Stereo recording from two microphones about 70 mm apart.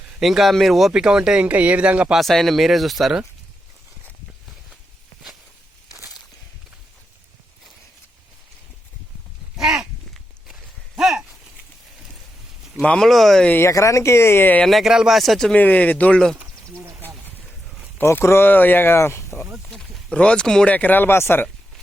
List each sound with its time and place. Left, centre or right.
0.1 s speech: centre
1.5 s a man's voice: right
2.1 s speech: centre
9.6 s a sound: centre
12.8 s speech: centre
13.1 s speech: centre
13.7 s speech: left
14.6 s speech: centre
15.5 s speech: left
16.6 s speech: right
17.0 s a sound: right
18.0 s speech: left
19.7 s speech: centre
20.7 s speech: left